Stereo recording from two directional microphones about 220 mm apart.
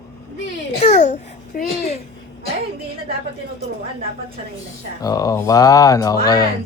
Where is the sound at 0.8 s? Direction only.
30° left (ahead or behind).